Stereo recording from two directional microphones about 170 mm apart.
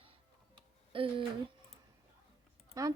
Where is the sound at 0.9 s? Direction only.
30° right (ahead or behind).